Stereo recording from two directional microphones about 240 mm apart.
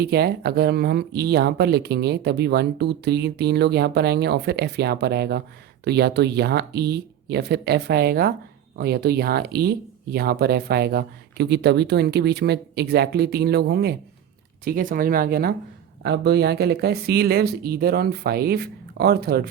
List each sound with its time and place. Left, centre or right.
0.0 s speech: right